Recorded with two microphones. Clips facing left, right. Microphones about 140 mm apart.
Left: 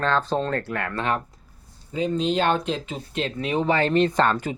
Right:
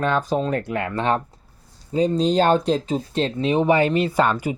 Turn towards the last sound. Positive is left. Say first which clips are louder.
# right 2 dB
turn(degrees=-10)  # may be behind; listen again after turning